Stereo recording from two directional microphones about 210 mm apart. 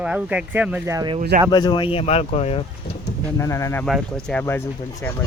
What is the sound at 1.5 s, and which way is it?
Speech, 20° left (ahead or behind).